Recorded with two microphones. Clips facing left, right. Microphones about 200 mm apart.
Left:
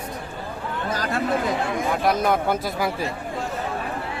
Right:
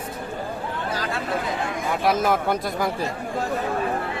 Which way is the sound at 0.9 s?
45° left (ahead or behind).